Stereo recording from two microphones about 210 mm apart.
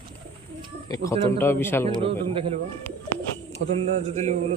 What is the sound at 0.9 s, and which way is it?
Speech, 15° left (ahead or behind).